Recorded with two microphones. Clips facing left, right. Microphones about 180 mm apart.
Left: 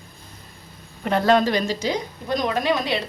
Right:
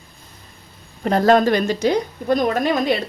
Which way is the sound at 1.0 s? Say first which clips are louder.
Right 4 dB; 45° right (ahead or behind).